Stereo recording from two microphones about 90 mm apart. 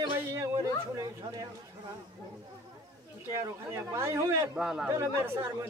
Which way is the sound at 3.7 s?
30° right (ahead or behind).